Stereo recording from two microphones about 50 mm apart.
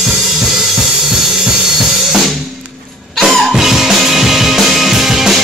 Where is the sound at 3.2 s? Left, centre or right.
Centre.